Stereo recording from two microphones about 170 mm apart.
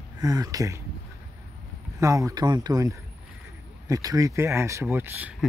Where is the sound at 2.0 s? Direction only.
20° right (ahead or behind).